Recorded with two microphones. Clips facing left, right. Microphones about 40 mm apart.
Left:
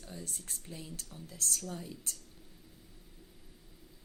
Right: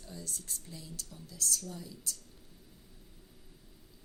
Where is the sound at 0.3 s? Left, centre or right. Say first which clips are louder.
Left 1 dB; left.